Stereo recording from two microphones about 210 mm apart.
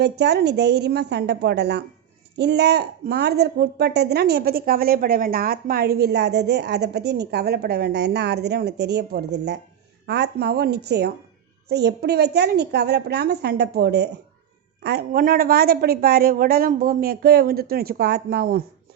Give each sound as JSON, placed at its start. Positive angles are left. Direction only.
{"t": 0.0, "sound": "a woman's voice", "side_deg": -55}